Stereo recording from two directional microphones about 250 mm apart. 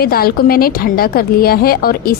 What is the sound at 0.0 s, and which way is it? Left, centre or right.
A woman's voice, left.